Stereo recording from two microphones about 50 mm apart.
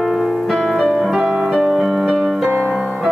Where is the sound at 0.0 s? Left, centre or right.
Centre.